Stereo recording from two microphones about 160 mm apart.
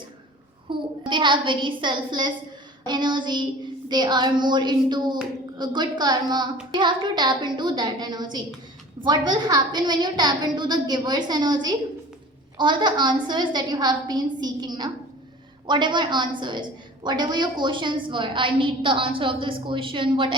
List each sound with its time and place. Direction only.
0.7 s a woman's voice: 30° right (ahead or behind)